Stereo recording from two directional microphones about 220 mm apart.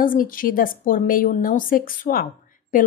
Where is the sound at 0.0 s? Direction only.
40° left (ahead or behind).